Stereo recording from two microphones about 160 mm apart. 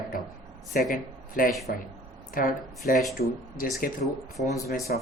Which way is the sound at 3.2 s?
75° left (ahead or behind).